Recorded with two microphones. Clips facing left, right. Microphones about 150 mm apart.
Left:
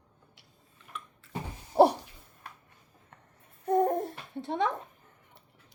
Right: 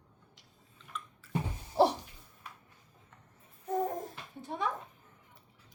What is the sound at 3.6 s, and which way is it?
Babbling, 65° left (ahead or behind).